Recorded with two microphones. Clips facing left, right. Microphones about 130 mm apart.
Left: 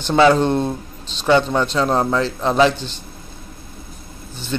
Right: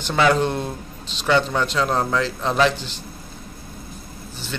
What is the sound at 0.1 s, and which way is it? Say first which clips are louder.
Speech: left 5 dB; 25° left (ahead or behind).